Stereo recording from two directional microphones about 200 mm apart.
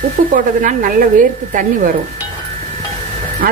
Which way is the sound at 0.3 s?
40° right (ahead or behind).